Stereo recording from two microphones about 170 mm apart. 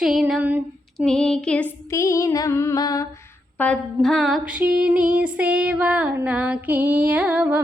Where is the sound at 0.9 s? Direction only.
5° left (ahead or behind); by 3.1 s 25° left (ahead or behind).